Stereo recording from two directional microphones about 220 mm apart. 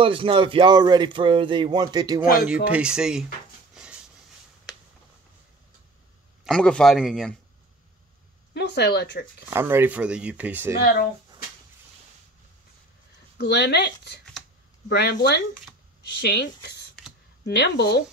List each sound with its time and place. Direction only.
0.0 s speech: 25° right (ahead or behind)
2.3 s speech: 5° right (ahead or behind)
3.7 s a sound: 5° right (ahead or behind)
6.4 s speech: 5° left (ahead or behind)
8.5 s speech: 50° left (ahead or behind)
9.5 s speech: 10° right (ahead or behind)
13.4 s speech: 50° left (ahead or behind)